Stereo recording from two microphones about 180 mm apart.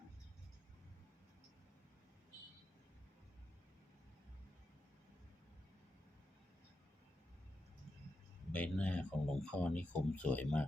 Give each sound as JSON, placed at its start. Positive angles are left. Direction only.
{"t": 8.5, "sound": "speech", "side_deg": 10}